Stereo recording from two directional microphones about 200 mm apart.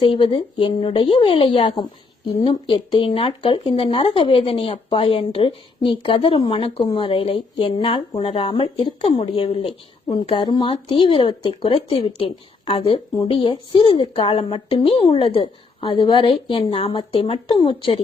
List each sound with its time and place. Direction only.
0.0 s speech: 25° left (ahead or behind)